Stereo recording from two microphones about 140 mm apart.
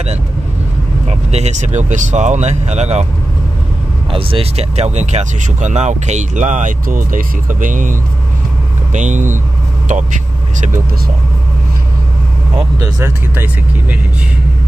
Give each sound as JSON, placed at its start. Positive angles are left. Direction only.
{"t": 1.0, "sound": "speech", "side_deg": -50}
{"t": 4.1, "sound": "speech", "side_deg": -40}
{"t": 12.7, "sound": "speech", "side_deg": -20}